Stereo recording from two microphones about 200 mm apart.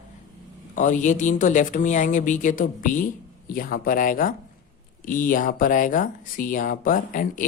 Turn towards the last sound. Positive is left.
turn(degrees=40)  # may be behind; listen again after turning